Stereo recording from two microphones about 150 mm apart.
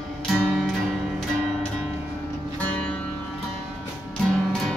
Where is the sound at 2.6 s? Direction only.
10° left (ahead or behind).